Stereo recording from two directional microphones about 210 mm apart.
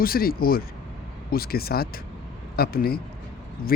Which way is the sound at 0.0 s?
45° left (ahead or behind).